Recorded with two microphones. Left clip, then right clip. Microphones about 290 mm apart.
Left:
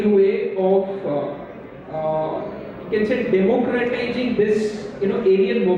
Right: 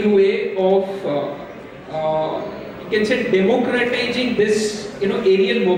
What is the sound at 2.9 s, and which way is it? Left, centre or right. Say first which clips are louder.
A man's voice: right 2 dB; centre.